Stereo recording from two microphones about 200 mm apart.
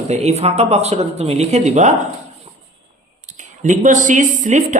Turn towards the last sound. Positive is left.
turn(degrees=-40)  # may be behind; listen again after turning